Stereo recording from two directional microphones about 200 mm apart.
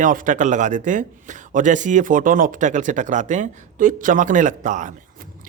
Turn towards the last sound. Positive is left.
turn(degrees=-40)  # may be behind; listen again after turning